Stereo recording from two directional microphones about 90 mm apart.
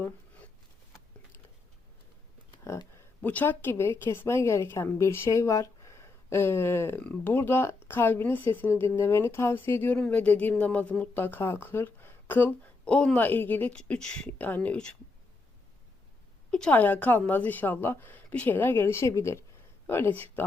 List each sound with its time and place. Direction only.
3.2 s a woman's voice: 20° left (ahead or behind)
12.8 s a woman's voice: 10° left (ahead or behind)
16.5 s a woman's voice: 10° left (ahead or behind)